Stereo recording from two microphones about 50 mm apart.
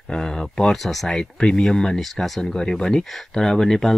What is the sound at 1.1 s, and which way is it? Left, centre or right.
Speech, centre.